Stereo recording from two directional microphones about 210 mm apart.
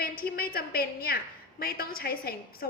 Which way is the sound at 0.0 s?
45° left (ahead or behind).